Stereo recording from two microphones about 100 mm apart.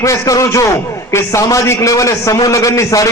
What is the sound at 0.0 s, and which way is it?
A man's voice, 30° left (ahead or behind).